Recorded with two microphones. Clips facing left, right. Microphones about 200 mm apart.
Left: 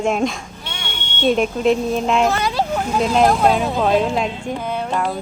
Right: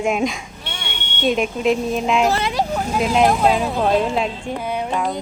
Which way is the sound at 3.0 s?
5° right (ahead or behind).